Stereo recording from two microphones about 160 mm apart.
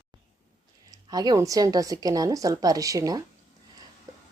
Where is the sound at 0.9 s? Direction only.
25° right (ahead or behind).